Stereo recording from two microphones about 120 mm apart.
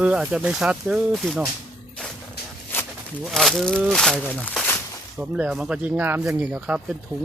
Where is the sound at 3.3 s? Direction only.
Centre (ahead or behind).